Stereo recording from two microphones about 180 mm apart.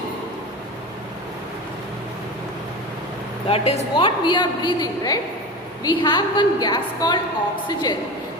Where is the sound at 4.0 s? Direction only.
25° left (ahead or behind).